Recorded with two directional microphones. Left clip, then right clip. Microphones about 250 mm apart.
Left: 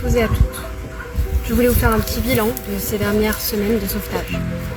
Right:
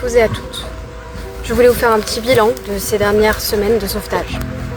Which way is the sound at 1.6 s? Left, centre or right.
Centre.